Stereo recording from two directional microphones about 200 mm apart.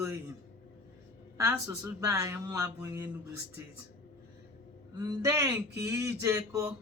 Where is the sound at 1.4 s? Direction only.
15° right (ahead or behind).